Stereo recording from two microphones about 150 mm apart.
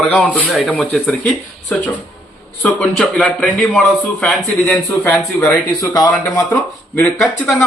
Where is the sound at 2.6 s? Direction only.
5° left (ahead or behind).